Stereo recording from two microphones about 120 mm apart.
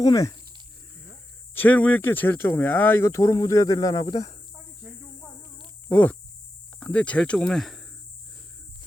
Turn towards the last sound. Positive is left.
turn(degrees=5)  # may be behind; listen again after turning